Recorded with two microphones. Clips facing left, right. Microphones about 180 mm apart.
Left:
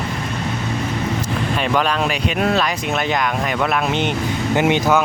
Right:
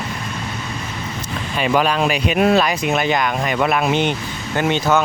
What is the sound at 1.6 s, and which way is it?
Speech, 5° right (ahead or behind).